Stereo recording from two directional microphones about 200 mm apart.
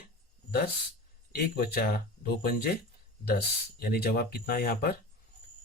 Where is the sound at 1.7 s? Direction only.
45° left (ahead or behind).